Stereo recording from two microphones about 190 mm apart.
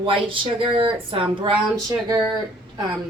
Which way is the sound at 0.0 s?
25° right (ahead or behind).